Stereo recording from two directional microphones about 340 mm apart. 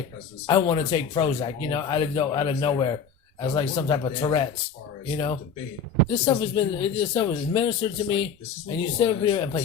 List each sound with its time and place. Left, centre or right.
0.4 s speech: centre